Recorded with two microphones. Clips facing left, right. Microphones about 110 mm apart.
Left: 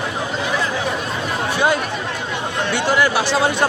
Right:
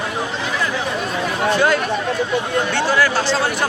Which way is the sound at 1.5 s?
15° left (ahead or behind).